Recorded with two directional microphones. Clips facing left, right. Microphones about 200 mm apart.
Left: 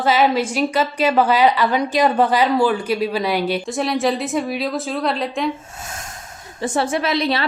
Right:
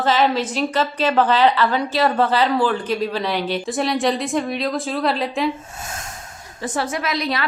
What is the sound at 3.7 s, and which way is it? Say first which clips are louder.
A woman's voice: right 3 dB; centre (ahead or behind).